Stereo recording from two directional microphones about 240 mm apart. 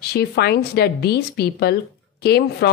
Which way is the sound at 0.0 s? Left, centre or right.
Left.